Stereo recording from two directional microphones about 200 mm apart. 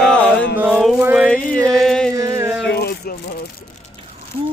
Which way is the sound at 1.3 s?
5° left (ahead or behind).